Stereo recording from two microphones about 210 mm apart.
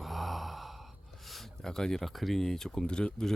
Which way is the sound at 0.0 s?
Centre (ahead or behind).